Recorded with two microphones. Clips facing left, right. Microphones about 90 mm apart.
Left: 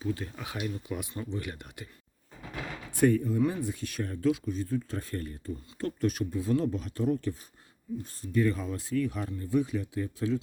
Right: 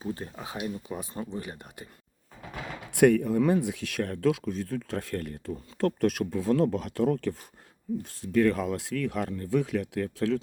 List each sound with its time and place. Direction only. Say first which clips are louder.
0.0 s speech: left 1 dB; 35° right (ahead or behind)
2.9 s speech: right 4 dB; 75° right (ahead or behind)